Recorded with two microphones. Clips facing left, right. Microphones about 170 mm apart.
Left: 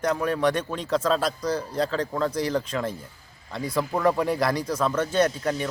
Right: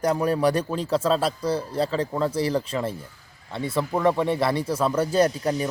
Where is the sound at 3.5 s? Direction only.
Centre (ahead or behind).